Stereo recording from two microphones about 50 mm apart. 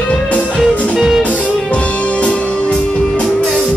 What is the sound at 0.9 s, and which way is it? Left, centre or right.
Music, centre.